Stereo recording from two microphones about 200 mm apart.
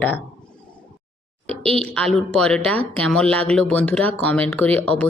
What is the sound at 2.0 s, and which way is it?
Speech, centre (ahead or behind).